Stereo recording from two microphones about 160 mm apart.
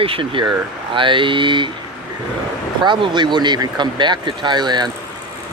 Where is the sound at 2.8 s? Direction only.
30° right (ahead or behind).